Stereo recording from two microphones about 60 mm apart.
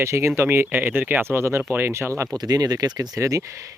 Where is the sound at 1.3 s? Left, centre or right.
Right.